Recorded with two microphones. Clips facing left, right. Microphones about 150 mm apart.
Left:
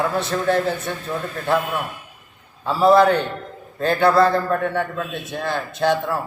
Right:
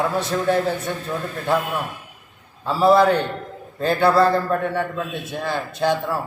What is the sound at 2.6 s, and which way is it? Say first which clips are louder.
A man's voice: left 1 dB; 5° right (ahead or behind).